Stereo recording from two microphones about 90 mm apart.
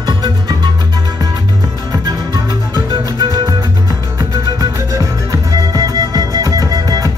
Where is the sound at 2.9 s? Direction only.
50° right (ahead or behind).